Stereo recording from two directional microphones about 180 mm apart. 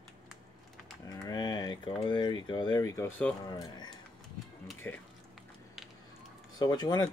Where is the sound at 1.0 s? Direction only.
20° left (ahead or behind).